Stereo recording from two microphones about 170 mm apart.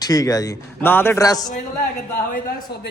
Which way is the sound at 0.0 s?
20° left (ahead or behind).